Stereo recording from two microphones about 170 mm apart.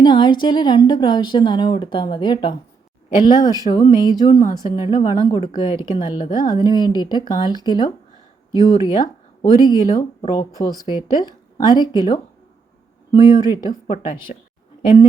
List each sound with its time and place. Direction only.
0.0 s a woman's voice: 25° left (ahead or behind)
14.3 s speech: 45° left (ahead or behind)